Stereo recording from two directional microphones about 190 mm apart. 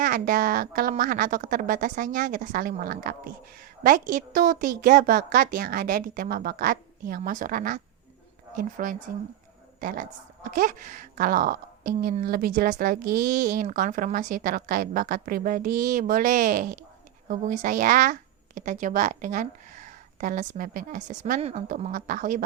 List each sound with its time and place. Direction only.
0.0 s speech: 45° right (ahead or behind)